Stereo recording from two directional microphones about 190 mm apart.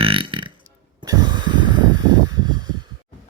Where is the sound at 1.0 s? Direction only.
20° right (ahead or behind).